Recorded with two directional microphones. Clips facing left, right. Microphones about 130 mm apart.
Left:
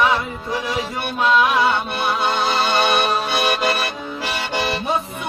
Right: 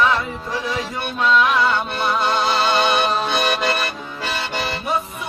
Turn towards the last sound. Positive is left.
turn(degrees=20)  # may be behind; listen again after turning